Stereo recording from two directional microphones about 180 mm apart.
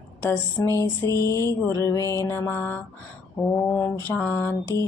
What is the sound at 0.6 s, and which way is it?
Mantra, 15° left (ahead or behind).